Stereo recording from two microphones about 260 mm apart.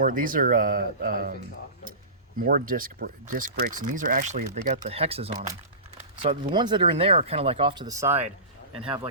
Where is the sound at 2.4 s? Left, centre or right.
Right.